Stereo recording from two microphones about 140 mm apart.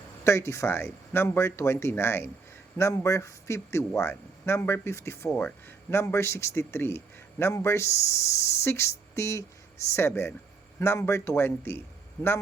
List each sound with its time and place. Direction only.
0.3 s speech: 20° left (ahead or behind)